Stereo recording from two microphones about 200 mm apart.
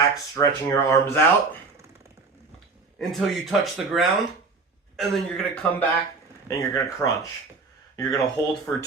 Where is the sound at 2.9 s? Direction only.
Centre (ahead or behind).